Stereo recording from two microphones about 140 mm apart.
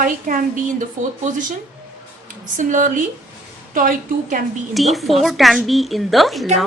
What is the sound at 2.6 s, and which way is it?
Speech, 65° right (ahead or behind).